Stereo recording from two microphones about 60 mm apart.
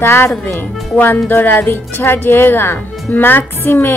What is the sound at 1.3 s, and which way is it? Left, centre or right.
Speech, left.